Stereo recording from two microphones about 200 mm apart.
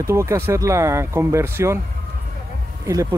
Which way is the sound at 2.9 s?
15° right (ahead or behind).